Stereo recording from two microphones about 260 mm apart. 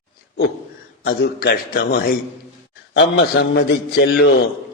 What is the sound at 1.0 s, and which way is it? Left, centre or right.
A man's voice, left.